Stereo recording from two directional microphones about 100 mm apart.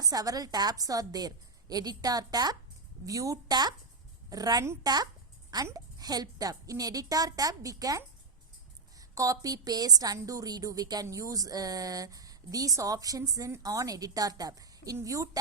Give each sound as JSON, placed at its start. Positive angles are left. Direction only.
{"t": 0.0, "sound": "a woman's voice", "side_deg": -40}